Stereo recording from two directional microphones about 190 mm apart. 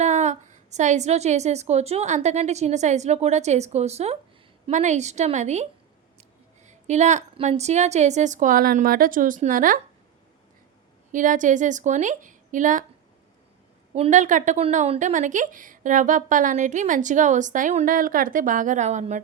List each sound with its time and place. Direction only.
0.0 s a woman's voice: 35° right (ahead or behind)
6.7 s a woman's voice: 40° right (ahead or behind)
11.1 s a woman's voice: 45° right (ahead or behind)
13.9 s a woman's voice: 35° right (ahead or behind)